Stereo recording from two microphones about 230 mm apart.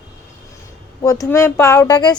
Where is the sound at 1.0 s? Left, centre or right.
Centre.